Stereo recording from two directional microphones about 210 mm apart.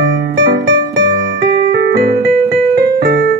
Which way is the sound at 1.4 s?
45° right (ahead or behind).